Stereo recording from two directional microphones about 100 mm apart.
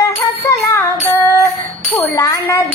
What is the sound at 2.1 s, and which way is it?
Speech, 30° left (ahead or behind).